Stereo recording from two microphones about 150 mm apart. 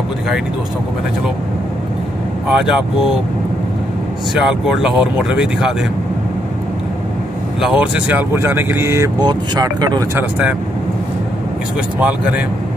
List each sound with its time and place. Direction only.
2.4 s speech: 5° right (ahead or behind)
4.4 s speech: centre (ahead or behind)
7.6 s speech: 10° right (ahead or behind); by 10.0 s 25° right (ahead or behind)
12.0 s speech: 10° right (ahead or behind)